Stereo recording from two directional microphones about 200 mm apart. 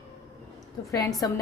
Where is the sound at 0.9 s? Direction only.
15° left (ahead or behind).